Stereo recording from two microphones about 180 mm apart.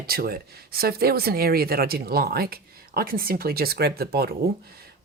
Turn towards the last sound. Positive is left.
turn(degrees=-60)  # may be behind; listen again after turning